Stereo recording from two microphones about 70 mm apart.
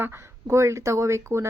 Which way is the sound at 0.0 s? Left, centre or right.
Right.